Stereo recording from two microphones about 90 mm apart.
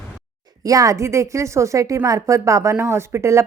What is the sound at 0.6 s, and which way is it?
A woman's voice, 40° right (ahead or behind).